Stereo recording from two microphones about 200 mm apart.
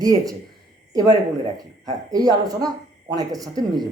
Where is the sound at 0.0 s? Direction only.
20° right (ahead or behind).